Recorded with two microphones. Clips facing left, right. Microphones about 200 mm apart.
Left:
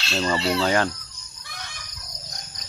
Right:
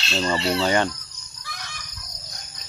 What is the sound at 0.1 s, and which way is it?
Speech, centre (ahead or behind).